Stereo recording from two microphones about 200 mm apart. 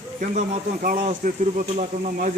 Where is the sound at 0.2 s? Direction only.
40° right (ahead or behind).